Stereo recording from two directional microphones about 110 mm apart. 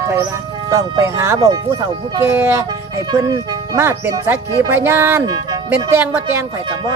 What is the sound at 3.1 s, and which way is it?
Speech, 35° right (ahead or behind).